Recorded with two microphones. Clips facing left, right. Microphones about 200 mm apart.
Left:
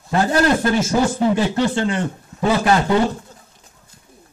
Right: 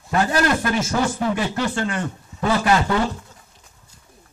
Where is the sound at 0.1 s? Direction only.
25° left (ahead or behind).